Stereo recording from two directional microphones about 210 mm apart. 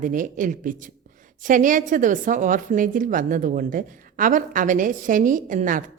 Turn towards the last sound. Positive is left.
turn(degrees=-40)  # may be behind; listen again after turning